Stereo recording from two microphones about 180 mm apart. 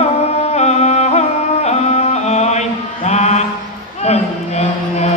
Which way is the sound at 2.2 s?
40° left (ahead or behind).